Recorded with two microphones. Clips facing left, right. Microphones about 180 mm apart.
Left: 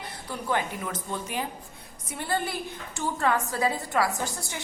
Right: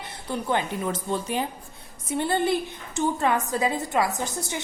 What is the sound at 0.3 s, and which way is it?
A woman's voice, 25° right (ahead or behind).